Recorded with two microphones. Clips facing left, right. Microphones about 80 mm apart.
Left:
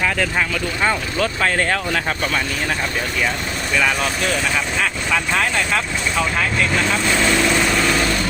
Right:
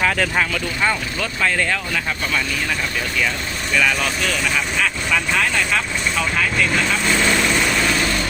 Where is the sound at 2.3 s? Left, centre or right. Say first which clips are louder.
Left 1 dB; left.